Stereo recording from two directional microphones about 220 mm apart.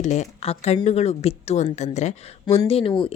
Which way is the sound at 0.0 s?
30° left (ahead or behind).